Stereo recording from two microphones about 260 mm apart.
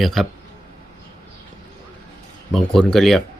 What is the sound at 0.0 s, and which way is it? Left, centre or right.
Speech, centre.